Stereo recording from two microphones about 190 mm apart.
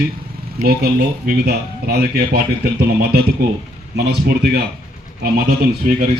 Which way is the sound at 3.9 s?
60° right (ahead or behind).